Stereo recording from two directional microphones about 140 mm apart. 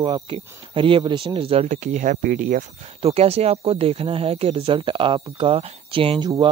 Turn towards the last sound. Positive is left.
turn(degrees=-40)  # may be behind; listen again after turning